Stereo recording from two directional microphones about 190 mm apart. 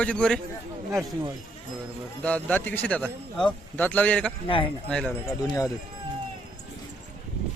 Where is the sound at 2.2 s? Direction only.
5° left (ahead or behind).